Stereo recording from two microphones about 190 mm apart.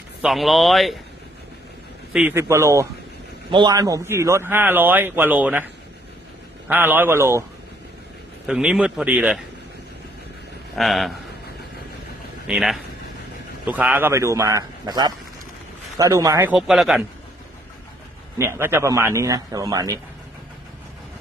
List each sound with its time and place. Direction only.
0.2 s speech: centre (ahead or behind)
2.1 s a man's voice: 10° right (ahead or behind)
6.7 s a man's voice: 10° right (ahead or behind)
8.4 s speech: 5° right (ahead or behind)
10.8 s speech: centre (ahead or behind)
12.5 s a man's voice: 5° right (ahead or behind)
16.6 s speech: centre (ahead or behind)
18.3 s a man's voice: 15° right (ahead or behind)